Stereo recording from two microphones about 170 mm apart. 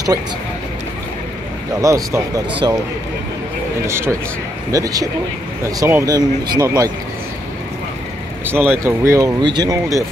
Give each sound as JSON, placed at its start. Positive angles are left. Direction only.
{"t": 1.8, "sound": "speech", "side_deg": -20}
{"t": 3.8, "sound": "speech", "side_deg": -15}
{"t": 8.5, "sound": "speech", "side_deg": -15}